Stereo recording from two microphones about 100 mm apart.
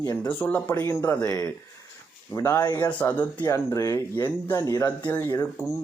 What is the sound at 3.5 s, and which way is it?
Speech, 30° left (ahead or behind).